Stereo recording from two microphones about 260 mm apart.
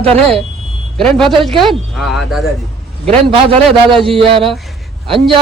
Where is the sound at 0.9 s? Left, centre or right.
Centre.